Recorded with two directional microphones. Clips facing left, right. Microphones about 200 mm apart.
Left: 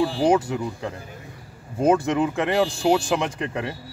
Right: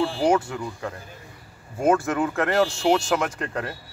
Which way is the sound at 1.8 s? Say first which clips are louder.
Left 2 dB; 15° left (ahead or behind).